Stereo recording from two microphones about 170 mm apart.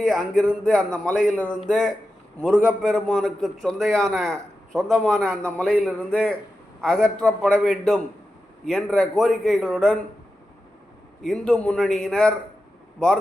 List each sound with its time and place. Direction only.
0.0 s a man's voice: 5° left (ahead or behind)
1.1 s a man's voice: 50° left (ahead or behind)
1.4 s a man's voice: 5° left (ahead or behind)
11.2 s a man's voice: 5° left (ahead or behind)